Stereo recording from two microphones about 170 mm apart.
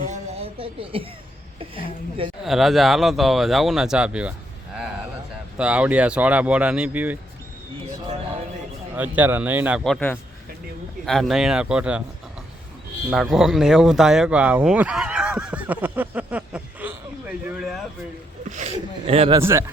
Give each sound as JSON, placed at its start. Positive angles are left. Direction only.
{"t": 0.0, "sound": "a sound", "side_deg": -40}
{"t": 2.4, "sound": "speech", "side_deg": 0}
{"t": 5.5, "sound": "speech", "side_deg": -5}
{"t": 9.0, "sound": "speech", "side_deg": -10}
{"t": 9.8, "sound": "a man's voice", "side_deg": 5}
{"t": 13.1, "sound": "speech", "side_deg": 0}
{"t": 18.4, "sound": "a man's voice", "side_deg": -45}
{"t": 19.4, "sound": "speech", "side_deg": -15}